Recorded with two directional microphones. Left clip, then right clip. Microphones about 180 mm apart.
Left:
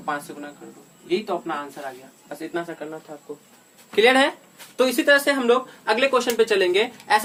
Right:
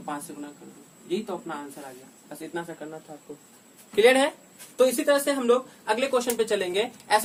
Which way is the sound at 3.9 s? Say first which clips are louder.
Left 3 dB; 20° left (ahead or behind).